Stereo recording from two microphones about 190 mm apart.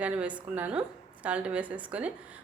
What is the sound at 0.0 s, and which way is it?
A woman's voice, 5° right (ahead or behind).